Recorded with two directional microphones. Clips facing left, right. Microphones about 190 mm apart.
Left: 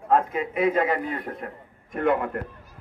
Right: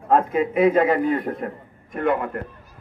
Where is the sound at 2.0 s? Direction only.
50° right (ahead or behind).